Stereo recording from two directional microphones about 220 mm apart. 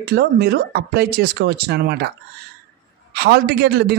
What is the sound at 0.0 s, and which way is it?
A man's voice, 45° right (ahead or behind).